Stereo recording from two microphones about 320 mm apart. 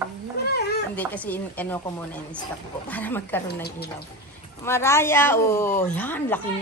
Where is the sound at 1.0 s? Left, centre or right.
Centre.